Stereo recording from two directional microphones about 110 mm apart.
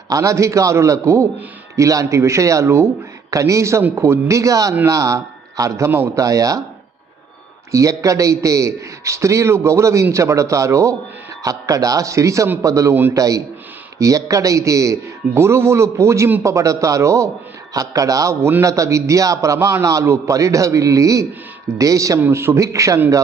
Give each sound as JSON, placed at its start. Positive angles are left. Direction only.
{"t": 0.1, "sound": "a man's voice", "side_deg": -30}
{"t": 7.7, "sound": "a man's voice", "side_deg": -30}